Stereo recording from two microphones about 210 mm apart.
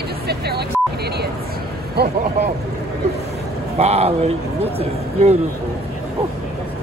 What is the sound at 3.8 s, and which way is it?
Speech, 30° right (ahead or behind).